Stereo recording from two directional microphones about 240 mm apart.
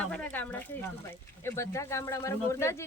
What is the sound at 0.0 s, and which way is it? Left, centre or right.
Speech, centre.